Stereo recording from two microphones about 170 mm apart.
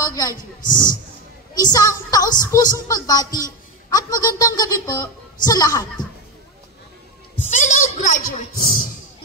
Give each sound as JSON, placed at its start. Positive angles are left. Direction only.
{"t": 0.0, "sound": "a woman's voice", "side_deg": 20}
{"t": 1.5, "sound": "a woman's voice", "side_deg": 25}
{"t": 7.4, "sound": "a sound", "side_deg": 45}